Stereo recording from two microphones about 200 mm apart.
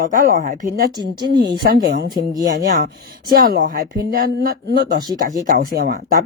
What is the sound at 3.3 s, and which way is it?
Speech, 45° right (ahead or behind).